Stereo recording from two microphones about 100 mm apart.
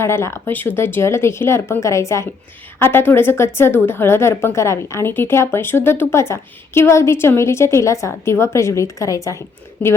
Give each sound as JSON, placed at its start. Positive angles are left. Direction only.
{"t": 0.0, "sound": "a woman's voice", "side_deg": 25}